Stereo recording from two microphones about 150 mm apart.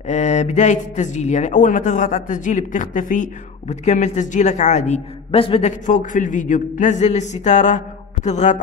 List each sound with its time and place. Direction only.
0.0 s speech: 50° left (ahead or behind)